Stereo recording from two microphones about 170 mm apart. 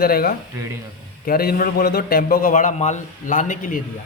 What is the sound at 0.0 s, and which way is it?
A man's voice, 60° left (ahead or behind).